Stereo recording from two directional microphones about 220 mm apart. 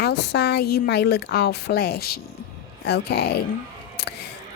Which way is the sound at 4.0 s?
45° left (ahead or behind).